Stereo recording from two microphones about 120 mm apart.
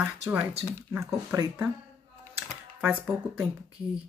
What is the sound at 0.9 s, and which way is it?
Speech, 25° right (ahead or behind).